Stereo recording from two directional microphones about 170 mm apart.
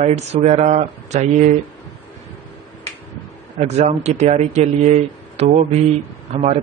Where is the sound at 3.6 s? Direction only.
40° right (ahead or behind).